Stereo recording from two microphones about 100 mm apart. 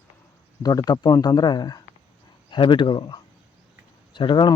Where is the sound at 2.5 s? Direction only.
55° left (ahead or behind).